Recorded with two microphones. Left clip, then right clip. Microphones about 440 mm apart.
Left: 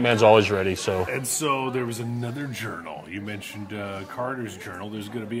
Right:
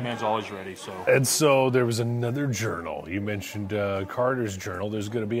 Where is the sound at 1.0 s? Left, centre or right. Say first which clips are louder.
Right 6 dB; right.